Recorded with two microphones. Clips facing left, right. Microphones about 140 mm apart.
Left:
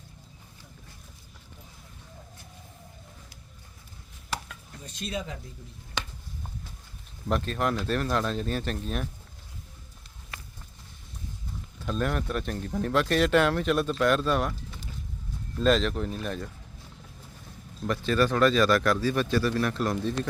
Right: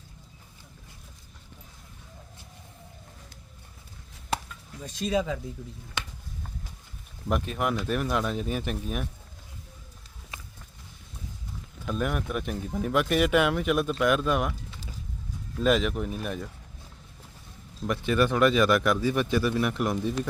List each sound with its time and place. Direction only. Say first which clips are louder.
7.3 s a man's voice: even; 10° right (ahead or behind)
11.8 s a man's voice: even; 10° right (ahead or behind)
15.6 s a man's voice: even; 10° right (ahead or behind)
17.8 s a man's voice: even; 15° right (ahead or behind)